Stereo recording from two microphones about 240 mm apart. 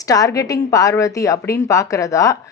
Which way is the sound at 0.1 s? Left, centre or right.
Centre.